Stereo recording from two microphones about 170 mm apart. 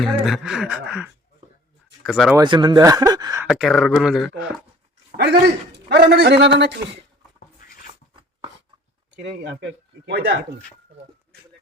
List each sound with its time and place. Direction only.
0.3 s speech: centre (ahead or behind)
2.3 s speech: 25° right (ahead or behind)
3.4 s speech: centre (ahead or behind)
5.1 s a man's voice: 80° right
9.4 s speech: 90° right